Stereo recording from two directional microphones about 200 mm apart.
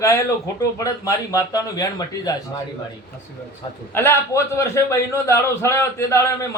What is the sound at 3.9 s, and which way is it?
A man's voice, 10° left (ahead or behind).